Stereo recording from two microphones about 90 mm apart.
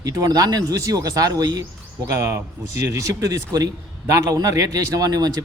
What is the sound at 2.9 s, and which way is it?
Speech, 40° right (ahead or behind).